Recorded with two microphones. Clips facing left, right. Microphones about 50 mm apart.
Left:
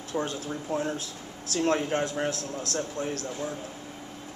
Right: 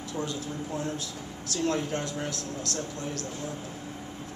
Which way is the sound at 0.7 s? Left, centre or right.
Left.